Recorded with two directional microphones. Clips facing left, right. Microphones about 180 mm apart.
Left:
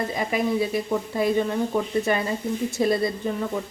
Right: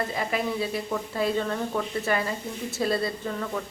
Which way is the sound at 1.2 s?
15° left (ahead or behind).